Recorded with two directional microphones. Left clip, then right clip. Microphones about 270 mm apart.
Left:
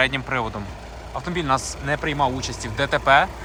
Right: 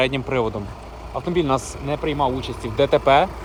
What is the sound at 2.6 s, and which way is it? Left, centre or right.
Speech, left.